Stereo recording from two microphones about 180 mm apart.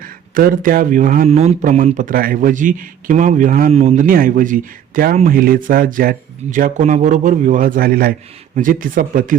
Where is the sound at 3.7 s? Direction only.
40° right (ahead or behind).